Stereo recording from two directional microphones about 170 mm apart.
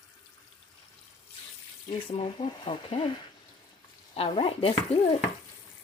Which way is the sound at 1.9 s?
30° left (ahead or behind).